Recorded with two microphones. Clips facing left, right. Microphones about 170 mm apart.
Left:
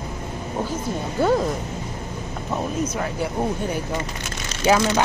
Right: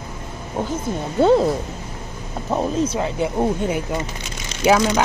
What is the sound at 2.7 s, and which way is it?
Speech, 30° right (ahead or behind).